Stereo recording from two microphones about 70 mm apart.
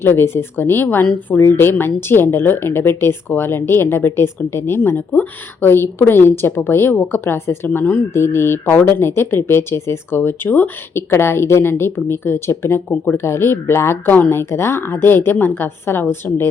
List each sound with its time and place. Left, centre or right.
0.0 s a woman's voice: left